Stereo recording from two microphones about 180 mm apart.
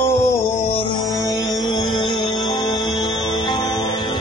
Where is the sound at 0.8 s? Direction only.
20° left (ahead or behind).